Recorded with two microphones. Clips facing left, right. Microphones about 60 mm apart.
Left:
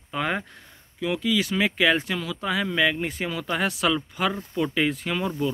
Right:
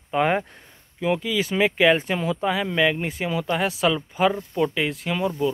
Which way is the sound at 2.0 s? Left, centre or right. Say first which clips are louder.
Right 5 dB; right.